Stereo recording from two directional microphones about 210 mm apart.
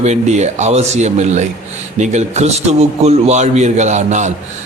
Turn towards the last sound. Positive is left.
turn(degrees=-35)  # may be behind; listen again after turning